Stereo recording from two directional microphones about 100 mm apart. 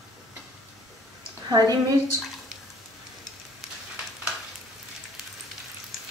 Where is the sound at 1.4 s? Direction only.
35° right (ahead or behind).